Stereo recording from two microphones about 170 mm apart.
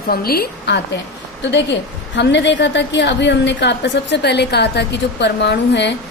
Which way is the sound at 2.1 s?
90° left.